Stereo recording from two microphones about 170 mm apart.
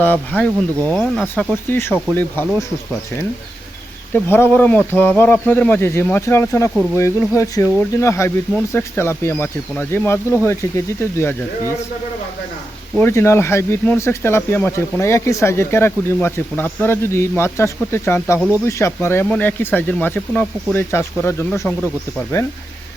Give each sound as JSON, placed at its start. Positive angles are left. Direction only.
{"t": 0.0, "sound": "speech", "side_deg": 10}
{"t": 4.1, "sound": "speech", "side_deg": 10}
{"t": 13.0, "sound": "speech", "side_deg": 15}